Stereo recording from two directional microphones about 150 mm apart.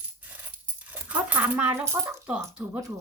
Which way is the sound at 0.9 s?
10° right (ahead or behind).